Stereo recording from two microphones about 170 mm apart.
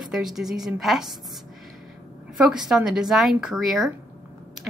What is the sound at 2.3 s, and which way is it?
Speech, 5° right (ahead or behind).